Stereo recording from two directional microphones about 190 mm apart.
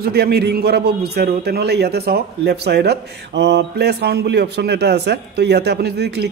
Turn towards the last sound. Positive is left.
turn(degrees=-60)  # may be behind; listen again after turning